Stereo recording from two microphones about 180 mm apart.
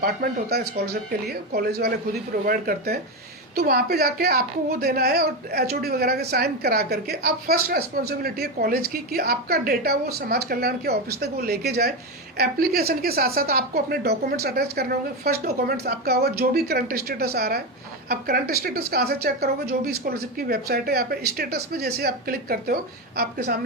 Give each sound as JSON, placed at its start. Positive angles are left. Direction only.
{"t": 0.0, "sound": "a woman's voice", "side_deg": -55}